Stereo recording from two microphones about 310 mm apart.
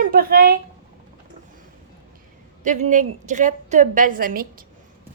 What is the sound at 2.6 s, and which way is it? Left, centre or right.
A woman's voice, right.